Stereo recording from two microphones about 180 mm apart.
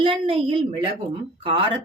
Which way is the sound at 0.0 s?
30° right (ahead or behind).